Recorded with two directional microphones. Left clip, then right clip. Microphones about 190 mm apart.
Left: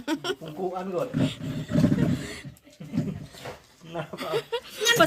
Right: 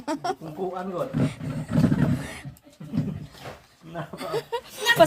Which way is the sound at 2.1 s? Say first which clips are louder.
Even; 5° right (ahead or behind).